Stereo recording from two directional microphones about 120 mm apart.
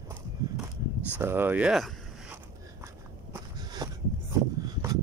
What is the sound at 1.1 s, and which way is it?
Speech, 15° right (ahead or behind).